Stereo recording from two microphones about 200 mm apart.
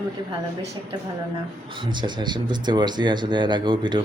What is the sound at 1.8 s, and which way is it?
Speech, 25° right (ahead or behind).